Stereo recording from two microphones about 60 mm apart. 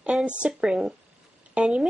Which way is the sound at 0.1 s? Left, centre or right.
Centre.